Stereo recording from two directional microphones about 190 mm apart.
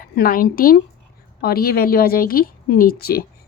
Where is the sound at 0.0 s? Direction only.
50° left (ahead or behind).